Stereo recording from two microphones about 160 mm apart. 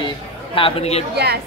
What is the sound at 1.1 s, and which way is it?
Speech, 90° right.